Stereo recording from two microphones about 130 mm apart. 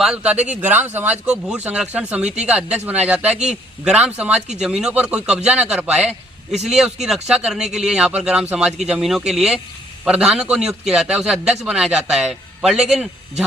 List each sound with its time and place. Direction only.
0.0 s a man's voice: 10° right (ahead or behind)